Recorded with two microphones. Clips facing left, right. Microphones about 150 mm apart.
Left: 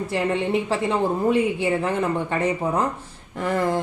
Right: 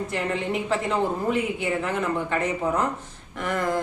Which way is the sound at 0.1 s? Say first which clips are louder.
Left 7 dB; 30° left (ahead or behind).